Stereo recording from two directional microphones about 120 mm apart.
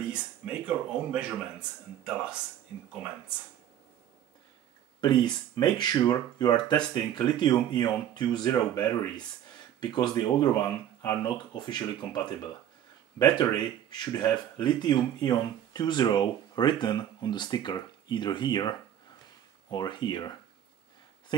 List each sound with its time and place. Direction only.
0.1 s speech: 10° right (ahead or behind)
5.0 s speech: 35° left (ahead or behind)
13.2 s speech: 35° left (ahead or behind)